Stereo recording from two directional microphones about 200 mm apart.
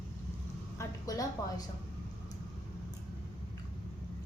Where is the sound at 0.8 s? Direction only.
15° left (ahead or behind).